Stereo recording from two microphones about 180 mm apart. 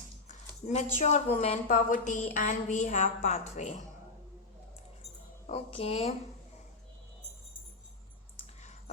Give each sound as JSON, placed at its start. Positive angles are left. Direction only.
{"t": 0.9, "sound": "a woman's voice", "side_deg": 40}
{"t": 5.5, "sound": "a woman's voice", "side_deg": 35}